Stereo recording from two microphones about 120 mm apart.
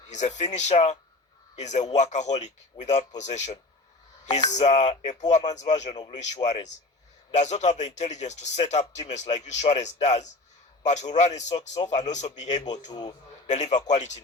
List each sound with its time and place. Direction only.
0.1 s speech: 75° left (ahead or behind)
12.6 s a man's voice: 35° left (ahead or behind)
13.5 s speech: 75° left (ahead or behind)